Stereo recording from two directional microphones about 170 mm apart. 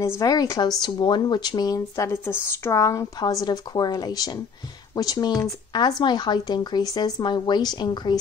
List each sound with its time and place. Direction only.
0.2 s speech: 20° left (ahead or behind)